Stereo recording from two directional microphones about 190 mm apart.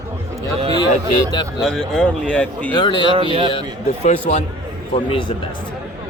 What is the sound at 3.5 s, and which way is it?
A man's voice, 35° left (ahead or behind).